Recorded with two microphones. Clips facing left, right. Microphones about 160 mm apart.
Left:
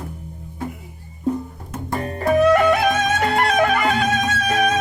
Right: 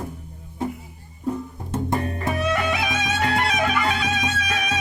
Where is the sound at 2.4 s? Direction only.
50° left (ahead or behind).